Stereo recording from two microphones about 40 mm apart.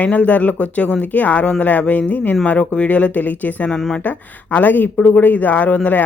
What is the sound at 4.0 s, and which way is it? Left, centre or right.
Speech, left.